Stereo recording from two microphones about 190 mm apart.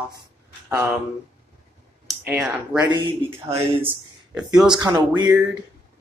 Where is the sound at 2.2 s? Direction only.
10° right (ahead or behind).